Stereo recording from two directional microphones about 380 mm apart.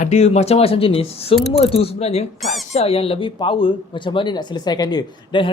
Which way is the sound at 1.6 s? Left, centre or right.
Centre.